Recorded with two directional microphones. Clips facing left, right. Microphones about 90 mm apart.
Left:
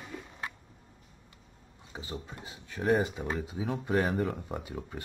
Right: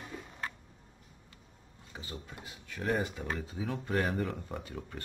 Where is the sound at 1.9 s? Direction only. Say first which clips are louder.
Left 4 dB; 20° left (ahead or behind).